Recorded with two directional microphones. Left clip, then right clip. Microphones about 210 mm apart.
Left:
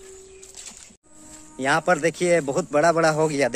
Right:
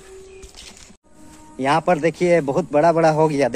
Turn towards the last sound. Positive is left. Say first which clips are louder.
# right 4 dB
turn(degrees=10)  # may be behind; listen again after turning